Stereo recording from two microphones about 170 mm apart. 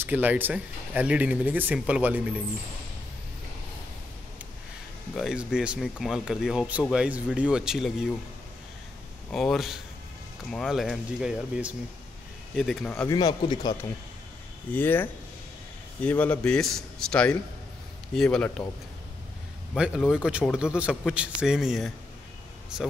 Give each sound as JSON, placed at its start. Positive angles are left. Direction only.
{"t": 0.0, "sound": "speech", "side_deg": -10}
{"t": 5.1, "sound": "speech", "side_deg": -5}
{"t": 9.3, "sound": "speech", "side_deg": 0}
{"t": 13.1, "sound": "speech", "side_deg": 25}
{"t": 14.7, "sound": "speech", "side_deg": 10}
{"t": 19.7, "sound": "speech", "side_deg": 0}